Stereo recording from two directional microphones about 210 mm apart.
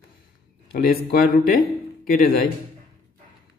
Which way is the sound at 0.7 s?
45° left (ahead or behind).